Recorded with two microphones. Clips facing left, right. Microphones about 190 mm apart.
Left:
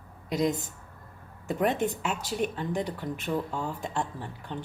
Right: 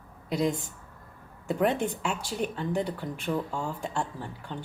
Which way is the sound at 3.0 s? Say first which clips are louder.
Even; centre (ahead or behind).